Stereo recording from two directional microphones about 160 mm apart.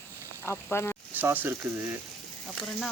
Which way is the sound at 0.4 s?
15° left (ahead or behind).